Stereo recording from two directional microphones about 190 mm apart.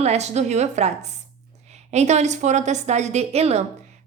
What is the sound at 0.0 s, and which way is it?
A woman's voice, 35° right (ahead or behind).